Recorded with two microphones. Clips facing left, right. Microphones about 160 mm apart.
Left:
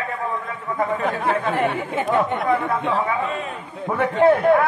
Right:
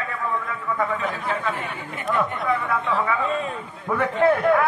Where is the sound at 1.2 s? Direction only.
75° left (ahead or behind).